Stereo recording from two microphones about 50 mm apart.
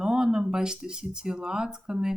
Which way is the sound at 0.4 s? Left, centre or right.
Centre.